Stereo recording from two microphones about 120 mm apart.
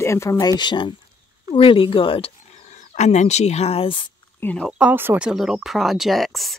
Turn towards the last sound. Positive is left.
turn(degrees=0)  # may be behind; listen again after turning